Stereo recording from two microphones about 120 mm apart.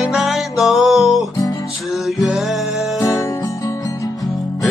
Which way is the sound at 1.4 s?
30° left (ahead or behind).